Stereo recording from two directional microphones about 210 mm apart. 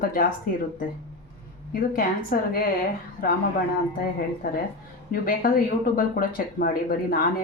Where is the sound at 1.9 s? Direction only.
45° left (ahead or behind).